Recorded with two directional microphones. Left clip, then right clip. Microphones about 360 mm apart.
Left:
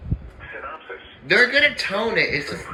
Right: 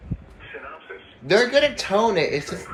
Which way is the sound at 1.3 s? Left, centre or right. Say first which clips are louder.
Left 1 dB; centre.